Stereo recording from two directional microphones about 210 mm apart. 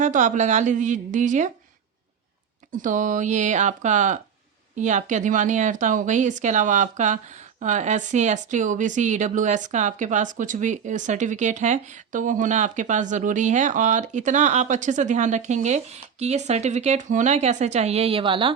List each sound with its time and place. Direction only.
0.0 s speech: 35° right (ahead or behind)
2.7 s speech: 40° right (ahead or behind)